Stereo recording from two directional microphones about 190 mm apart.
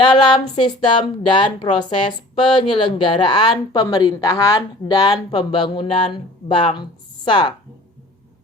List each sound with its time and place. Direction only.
0.0 s speech: 25° left (ahead or behind)